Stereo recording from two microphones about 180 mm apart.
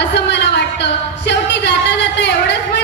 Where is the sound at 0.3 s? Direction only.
70° left (ahead or behind).